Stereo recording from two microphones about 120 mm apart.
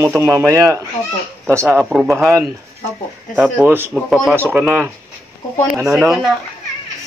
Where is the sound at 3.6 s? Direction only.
20° right (ahead or behind).